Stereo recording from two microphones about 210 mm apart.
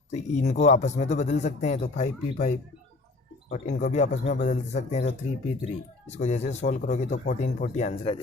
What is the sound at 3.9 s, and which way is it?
Speech, 35° left (ahead or behind).